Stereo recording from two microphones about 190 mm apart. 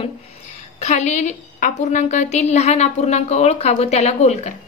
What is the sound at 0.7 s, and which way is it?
A woman's voice, 35° left (ahead or behind).